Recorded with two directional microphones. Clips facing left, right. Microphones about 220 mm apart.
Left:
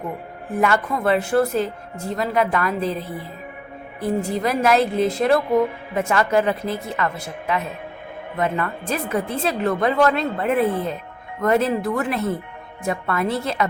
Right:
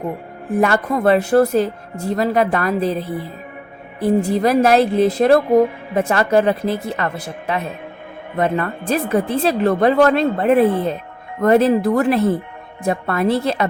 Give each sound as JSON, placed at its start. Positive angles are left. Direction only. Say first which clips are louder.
{"t": 0.6, "sound": "speech", "louder": "right 4 dB", "side_deg": -40}
{"t": 4.0, "sound": "speech", "louder": "right 6 dB", "side_deg": -35}